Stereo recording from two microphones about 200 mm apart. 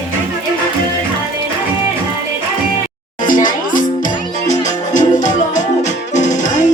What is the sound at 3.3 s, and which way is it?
Music, 40° left (ahead or behind).